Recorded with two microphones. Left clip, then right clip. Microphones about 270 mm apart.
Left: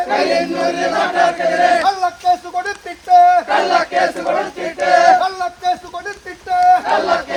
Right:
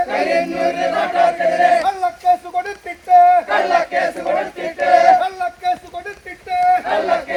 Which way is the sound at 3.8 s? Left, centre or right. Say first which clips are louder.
Left 2 dB; left.